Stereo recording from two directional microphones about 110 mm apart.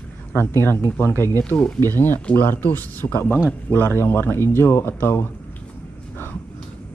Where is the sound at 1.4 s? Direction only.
10° left (ahead or behind).